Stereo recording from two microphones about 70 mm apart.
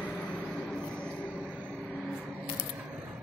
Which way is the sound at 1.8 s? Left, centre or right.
Centre.